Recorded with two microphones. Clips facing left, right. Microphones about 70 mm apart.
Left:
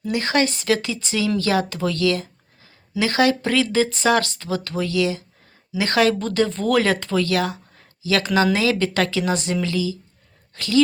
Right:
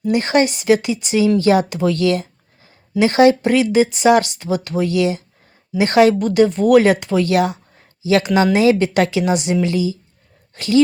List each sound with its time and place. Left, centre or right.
0.1 s speech: right